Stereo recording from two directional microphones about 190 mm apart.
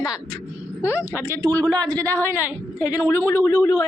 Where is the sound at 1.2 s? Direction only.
15° right (ahead or behind).